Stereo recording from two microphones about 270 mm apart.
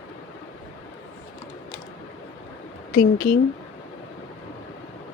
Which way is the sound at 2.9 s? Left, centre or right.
Left.